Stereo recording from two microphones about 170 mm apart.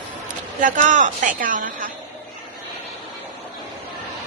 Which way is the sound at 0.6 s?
50° right (ahead or behind).